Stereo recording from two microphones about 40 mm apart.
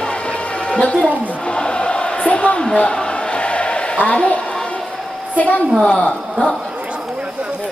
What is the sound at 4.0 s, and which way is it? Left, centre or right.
Speech, left.